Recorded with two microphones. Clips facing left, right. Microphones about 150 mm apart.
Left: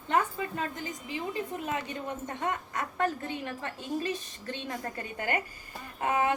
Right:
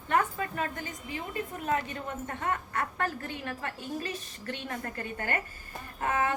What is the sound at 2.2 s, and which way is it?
A woman's voice, 15° left (ahead or behind).